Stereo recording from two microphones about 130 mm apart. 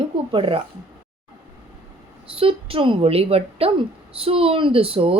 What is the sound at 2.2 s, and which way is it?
A woman's voice, 45° right (ahead or behind).